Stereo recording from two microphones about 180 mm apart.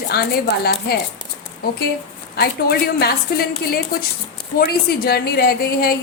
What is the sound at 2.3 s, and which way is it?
A woman's voice, 60° left (ahead or behind).